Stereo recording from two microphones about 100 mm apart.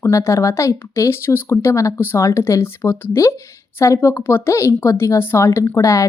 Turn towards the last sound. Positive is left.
turn(degrees=30)  # may be behind; listen again after turning